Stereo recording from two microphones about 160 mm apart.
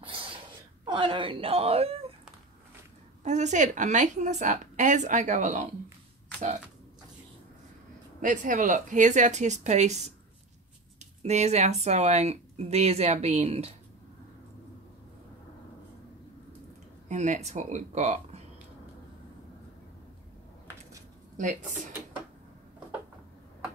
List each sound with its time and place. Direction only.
0.0 s a sound: 35° right (ahead or behind)
0.8 s speech: 30° right (ahead or behind)
3.3 s speech: 45° right (ahead or behind)
8.2 s speech: 55° right (ahead or behind)
17.1 s speech: 45° right (ahead or behind)
21.4 s speech: 50° right (ahead or behind)